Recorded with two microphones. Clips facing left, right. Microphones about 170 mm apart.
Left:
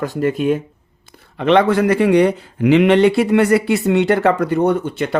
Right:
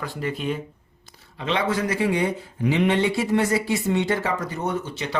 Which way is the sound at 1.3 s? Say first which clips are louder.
Left 11 dB; 60° left (ahead or behind).